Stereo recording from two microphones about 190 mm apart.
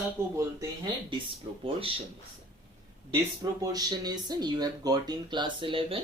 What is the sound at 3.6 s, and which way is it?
Speech, 20° right (ahead or behind).